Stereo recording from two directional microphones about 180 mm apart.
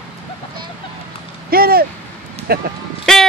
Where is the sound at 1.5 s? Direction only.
55° right (ahead or behind).